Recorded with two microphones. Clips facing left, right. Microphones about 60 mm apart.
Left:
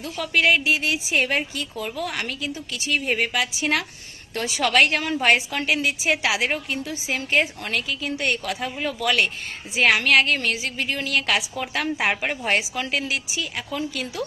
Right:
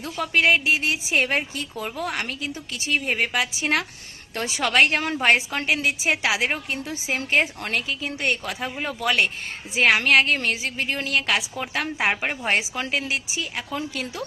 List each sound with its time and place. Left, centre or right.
0.0 s a woman's voice: right
7.2 s speech: right
8.2 s a woman's voice: right
11.3 s a woman's voice: right